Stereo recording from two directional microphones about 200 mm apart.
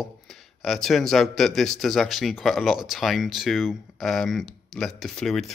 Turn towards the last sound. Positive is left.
turn(degrees=0)  # may be behind; listen again after turning